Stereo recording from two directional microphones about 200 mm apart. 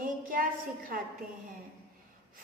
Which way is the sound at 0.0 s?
45° right (ahead or behind).